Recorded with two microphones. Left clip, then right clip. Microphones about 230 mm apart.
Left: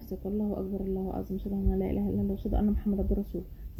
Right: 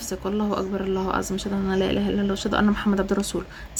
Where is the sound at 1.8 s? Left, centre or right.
Right.